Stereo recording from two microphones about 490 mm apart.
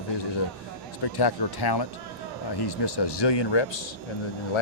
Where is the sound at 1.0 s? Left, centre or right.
Left.